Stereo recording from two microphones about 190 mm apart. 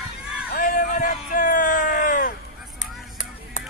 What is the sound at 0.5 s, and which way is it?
Bellow, 45° left (ahead or behind).